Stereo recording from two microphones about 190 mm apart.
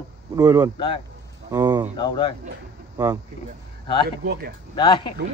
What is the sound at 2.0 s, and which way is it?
Speech, 25° left (ahead or behind).